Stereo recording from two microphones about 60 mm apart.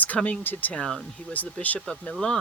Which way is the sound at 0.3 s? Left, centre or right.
Left.